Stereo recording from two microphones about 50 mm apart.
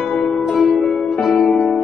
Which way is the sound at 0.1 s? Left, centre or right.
Centre.